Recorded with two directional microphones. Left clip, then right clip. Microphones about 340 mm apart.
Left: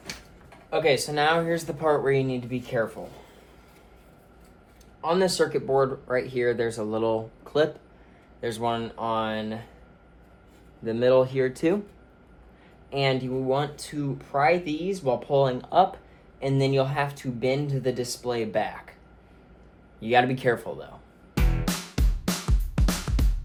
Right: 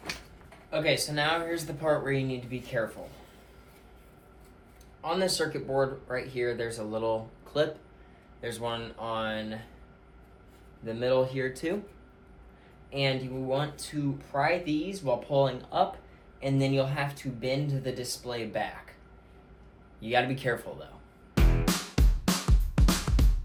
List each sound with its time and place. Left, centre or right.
0.7 s speech: centre
4.9 s speech: left
10.8 s speech: left
12.9 s speech: left
20.0 s speech: left
21.3 s music: centre